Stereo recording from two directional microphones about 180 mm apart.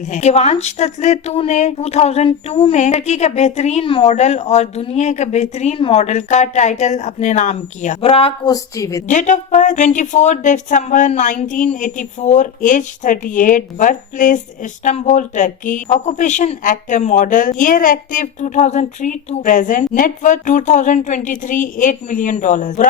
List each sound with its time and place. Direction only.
0.1 s a woman's voice: 35° left (ahead or behind)
8.5 s a woman's voice: 20° left (ahead or behind)
9.0 s speech: 40° left (ahead or behind)